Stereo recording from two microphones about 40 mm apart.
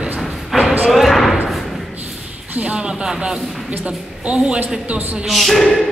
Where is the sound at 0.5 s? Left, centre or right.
Centre.